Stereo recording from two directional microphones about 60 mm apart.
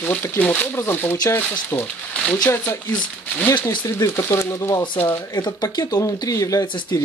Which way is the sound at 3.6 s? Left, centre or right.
Left.